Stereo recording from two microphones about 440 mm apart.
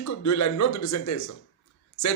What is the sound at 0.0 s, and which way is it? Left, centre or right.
Speech, left.